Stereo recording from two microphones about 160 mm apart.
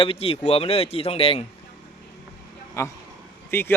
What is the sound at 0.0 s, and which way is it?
Speech, 35° left (ahead or behind).